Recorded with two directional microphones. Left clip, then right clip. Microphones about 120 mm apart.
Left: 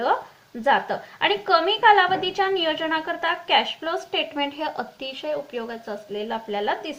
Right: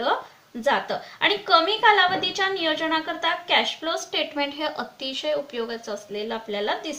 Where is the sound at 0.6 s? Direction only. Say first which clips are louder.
Left 2 dB; 35° left (ahead or behind).